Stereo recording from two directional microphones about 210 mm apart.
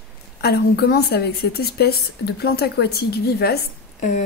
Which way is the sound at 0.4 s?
50° left (ahead or behind).